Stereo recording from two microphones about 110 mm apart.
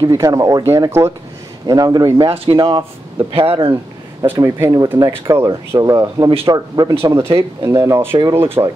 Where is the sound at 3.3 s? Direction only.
60° right (ahead or behind).